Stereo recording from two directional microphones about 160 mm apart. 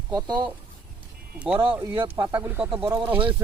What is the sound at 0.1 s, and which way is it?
Speech, 25° right (ahead or behind).